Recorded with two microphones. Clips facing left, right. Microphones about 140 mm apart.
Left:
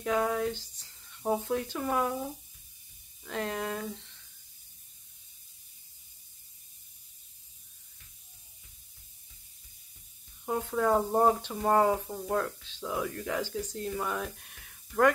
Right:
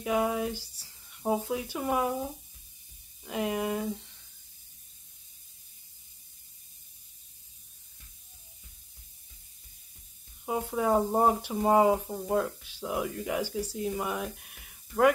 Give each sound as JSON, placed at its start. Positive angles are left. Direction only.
{"t": 0.0, "sound": "speech", "side_deg": -10}
{"t": 3.3, "sound": "speech", "side_deg": -10}
{"t": 10.4, "sound": "speech", "side_deg": -10}